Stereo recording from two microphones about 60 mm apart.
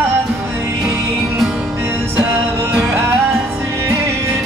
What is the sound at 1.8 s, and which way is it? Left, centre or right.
Music, right.